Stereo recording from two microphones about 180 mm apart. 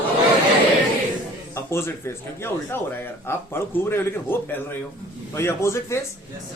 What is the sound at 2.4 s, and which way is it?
A man's voice, 10° left (ahead or behind).